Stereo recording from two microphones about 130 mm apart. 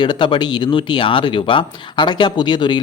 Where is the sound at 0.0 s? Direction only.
40° left (ahead or behind).